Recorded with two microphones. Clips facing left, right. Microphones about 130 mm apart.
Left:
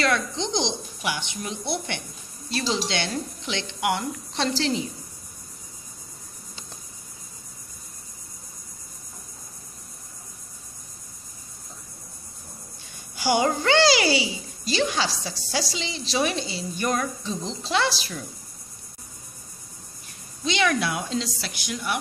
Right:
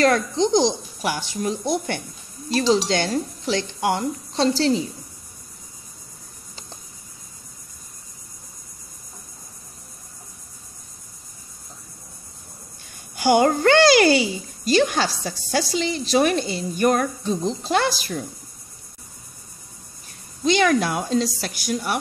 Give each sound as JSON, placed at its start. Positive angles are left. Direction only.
{"t": 0.0, "sound": "speech", "side_deg": -45}
{"t": 13.1, "sound": "a child's voice", "side_deg": -50}
{"t": 20.4, "sound": "a child's voice", "side_deg": -45}